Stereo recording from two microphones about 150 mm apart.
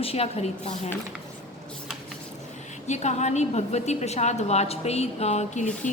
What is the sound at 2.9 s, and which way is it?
A woman's voice, 50° left (ahead or behind).